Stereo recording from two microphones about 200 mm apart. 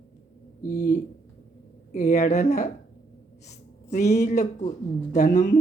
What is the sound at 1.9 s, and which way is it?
Speech, 35° left (ahead or behind).